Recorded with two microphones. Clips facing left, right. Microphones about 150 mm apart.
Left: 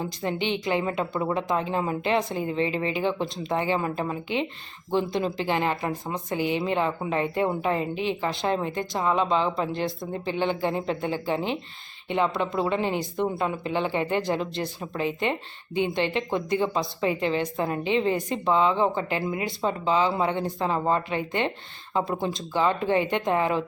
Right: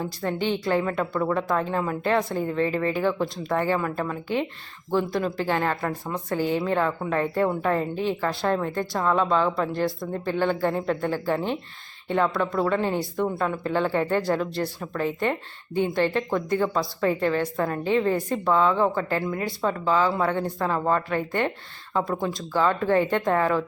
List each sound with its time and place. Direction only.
0.0 s a woman's voice: 20° left (ahead or behind)